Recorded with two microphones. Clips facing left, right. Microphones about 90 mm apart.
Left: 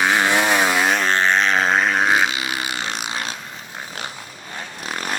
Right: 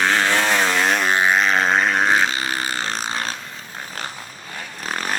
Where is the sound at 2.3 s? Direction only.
40° right (ahead or behind).